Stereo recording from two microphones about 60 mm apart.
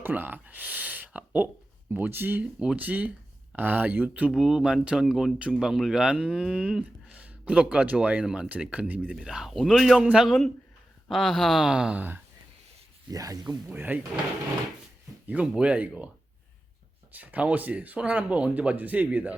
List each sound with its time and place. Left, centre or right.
0.0 s speech: right
2.4 s speech: centre
4.3 s a man's voice: centre
8.7 s speech: right
9.1 s a man's voice: centre
11.6 s speech: centre
11.9 s speech: right
13.1 s speech: right
13.7 s speech: right
15.3 s speech: right
17.1 s speech: right